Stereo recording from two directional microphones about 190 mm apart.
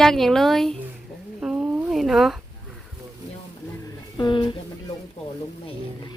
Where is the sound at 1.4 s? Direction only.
5° right (ahead or behind).